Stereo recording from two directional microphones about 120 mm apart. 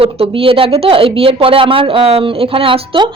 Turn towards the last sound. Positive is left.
turn(degrees=-50)  # may be behind; listen again after turning